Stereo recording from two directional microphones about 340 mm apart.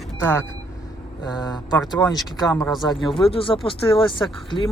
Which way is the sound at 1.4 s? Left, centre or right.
Centre.